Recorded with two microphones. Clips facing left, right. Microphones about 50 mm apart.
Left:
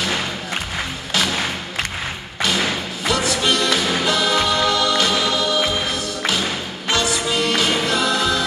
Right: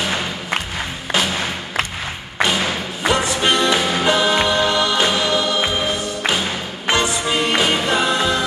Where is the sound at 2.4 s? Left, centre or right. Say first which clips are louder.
Right 2 dB; right.